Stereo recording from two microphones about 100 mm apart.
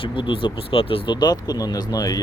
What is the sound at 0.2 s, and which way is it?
Speech, 55° left (ahead or behind).